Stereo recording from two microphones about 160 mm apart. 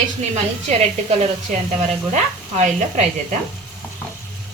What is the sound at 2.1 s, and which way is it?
Stir, 50° right (ahead or behind).